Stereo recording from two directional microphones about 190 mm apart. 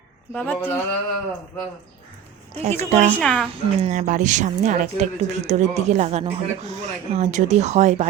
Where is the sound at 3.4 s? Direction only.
35° right (ahead or behind).